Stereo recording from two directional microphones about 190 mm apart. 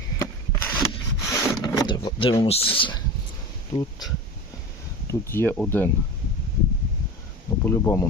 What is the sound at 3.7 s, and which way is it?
Speech, 20° left (ahead or behind).